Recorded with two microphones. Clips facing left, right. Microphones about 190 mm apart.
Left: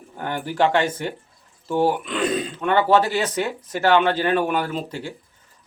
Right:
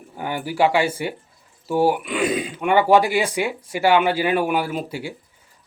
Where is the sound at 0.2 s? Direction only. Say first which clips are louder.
Right 1 dB; 10° right (ahead or behind).